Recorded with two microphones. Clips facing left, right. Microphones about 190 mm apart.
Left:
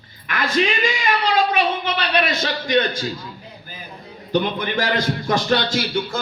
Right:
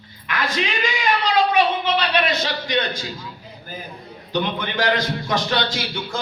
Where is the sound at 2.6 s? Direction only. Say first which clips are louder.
Left 4 dB; 50° left (ahead or behind).